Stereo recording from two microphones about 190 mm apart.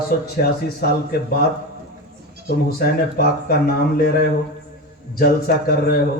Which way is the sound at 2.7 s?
50° left (ahead or behind).